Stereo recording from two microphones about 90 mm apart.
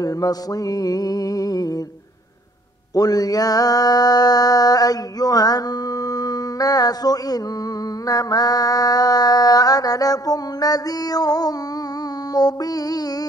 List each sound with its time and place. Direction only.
0.0 s mantra: 45° left (ahead or behind)
2.9 s mantra: 45° left (ahead or behind)